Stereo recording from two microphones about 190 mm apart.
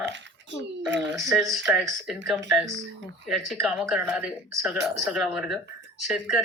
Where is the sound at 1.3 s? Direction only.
Centre (ahead or behind).